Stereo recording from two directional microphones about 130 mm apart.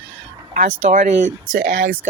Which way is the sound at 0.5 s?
80° right.